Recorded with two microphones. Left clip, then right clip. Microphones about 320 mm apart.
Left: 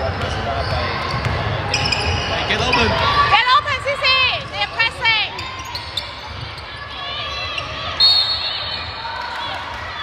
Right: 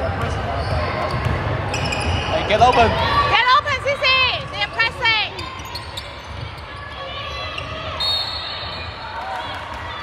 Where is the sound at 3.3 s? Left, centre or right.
Centre.